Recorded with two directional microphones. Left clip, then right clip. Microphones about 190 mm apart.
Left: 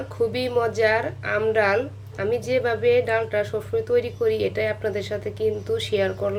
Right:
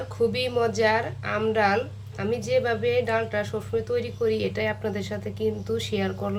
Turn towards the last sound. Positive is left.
turn(degrees=0)  # may be behind; listen again after turning